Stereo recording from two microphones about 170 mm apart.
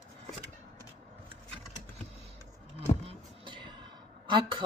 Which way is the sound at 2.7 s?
35° right (ahead or behind).